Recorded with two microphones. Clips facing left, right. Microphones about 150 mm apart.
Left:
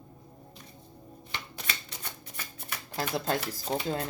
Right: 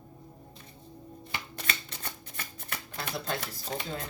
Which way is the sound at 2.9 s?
35° left (ahead or behind).